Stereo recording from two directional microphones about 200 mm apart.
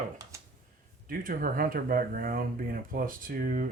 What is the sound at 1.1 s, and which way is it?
Speech, 45° right (ahead or behind).